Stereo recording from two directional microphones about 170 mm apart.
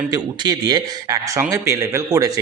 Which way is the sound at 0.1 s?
25° right (ahead or behind).